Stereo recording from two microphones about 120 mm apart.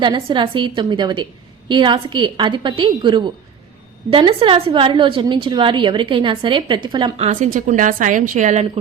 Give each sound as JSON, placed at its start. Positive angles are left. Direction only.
{"t": 0.0, "sound": "a woman's voice", "side_deg": -40}
{"t": 7.2, "sound": "a woman's voice", "side_deg": -90}